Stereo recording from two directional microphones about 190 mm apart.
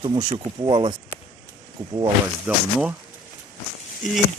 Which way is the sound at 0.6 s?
25° right (ahead or behind).